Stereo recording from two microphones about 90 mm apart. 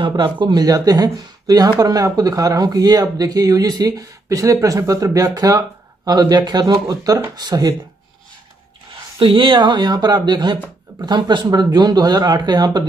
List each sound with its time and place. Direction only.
0.1 s speech: 60° right (ahead or behind)
9.2 s speech: 65° right (ahead or behind); by 12.8 s 50° right (ahead or behind)